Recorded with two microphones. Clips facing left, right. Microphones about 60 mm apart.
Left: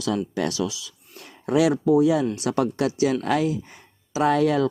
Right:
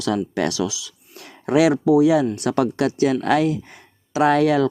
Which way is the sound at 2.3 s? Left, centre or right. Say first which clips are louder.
Right 3 dB; right.